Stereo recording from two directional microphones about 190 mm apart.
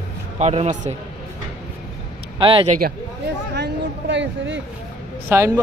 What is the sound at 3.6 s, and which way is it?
Speech, 70° right (ahead or behind).